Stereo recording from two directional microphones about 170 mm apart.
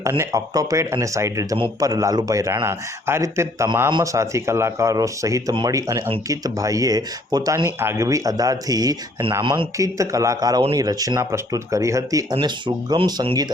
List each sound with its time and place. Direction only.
0.0 s speech: 15° right (ahead or behind)